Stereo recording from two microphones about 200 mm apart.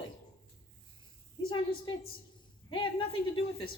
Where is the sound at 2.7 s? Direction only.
25° left (ahead or behind).